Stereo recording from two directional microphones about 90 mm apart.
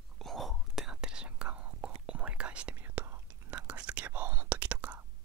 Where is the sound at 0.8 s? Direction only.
10° right (ahead or behind); by 3.2 s 25° right (ahead or behind).